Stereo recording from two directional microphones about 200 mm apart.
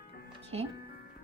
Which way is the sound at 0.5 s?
30° right (ahead or behind).